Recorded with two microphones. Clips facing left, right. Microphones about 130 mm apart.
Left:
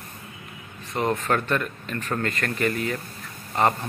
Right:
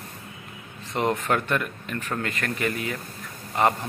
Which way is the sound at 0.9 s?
15° right (ahead or behind).